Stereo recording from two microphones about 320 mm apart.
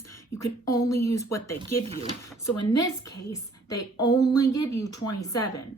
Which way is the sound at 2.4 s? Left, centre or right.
Left.